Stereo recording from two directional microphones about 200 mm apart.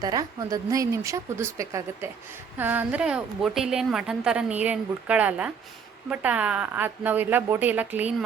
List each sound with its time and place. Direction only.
0.0 s a woman's voice: 20° right (ahead or behind)